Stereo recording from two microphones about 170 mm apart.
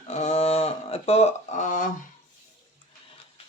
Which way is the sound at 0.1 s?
40° left (ahead or behind).